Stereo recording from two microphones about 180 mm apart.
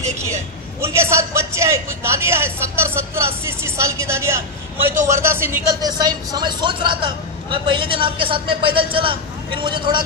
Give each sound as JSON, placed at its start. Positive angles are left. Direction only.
{"t": 0.2, "sound": "a man's voice", "side_deg": -15}